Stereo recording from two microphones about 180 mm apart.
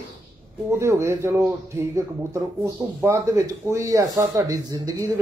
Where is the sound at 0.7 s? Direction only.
15° right (ahead or behind).